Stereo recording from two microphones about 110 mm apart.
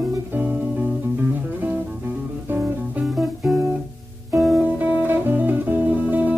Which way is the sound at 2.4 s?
20° right (ahead or behind).